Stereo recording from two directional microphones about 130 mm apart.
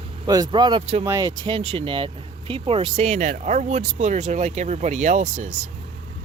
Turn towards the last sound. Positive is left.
turn(degrees=-65)  # may be behind; listen again after turning